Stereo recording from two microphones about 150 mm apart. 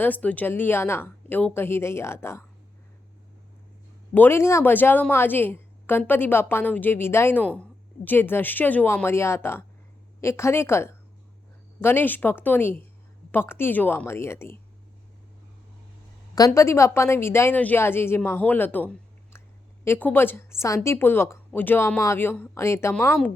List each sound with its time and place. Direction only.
0.0 s a woman's voice: 10° left (ahead or behind)
4.1 s a woman's voice: 15° left (ahead or behind)
16.3 s a woman's voice: 20° left (ahead or behind)